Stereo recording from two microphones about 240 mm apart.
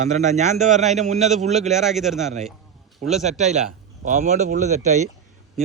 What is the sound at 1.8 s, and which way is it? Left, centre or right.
Speech, centre.